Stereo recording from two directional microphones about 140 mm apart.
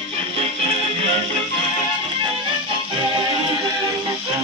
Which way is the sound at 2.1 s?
35° right (ahead or behind).